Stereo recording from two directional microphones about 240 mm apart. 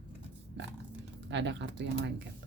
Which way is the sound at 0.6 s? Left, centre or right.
Right.